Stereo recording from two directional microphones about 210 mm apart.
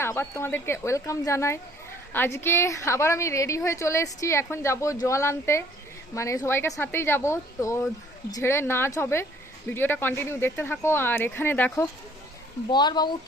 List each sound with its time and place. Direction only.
0.0 s a woman's voice: 10° left (ahead or behind)